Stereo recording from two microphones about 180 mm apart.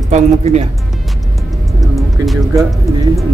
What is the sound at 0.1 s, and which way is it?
Speech, 35° right (ahead or behind).